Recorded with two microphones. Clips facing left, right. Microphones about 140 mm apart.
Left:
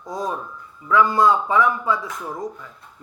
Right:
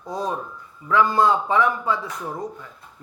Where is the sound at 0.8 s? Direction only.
30° right (ahead or behind).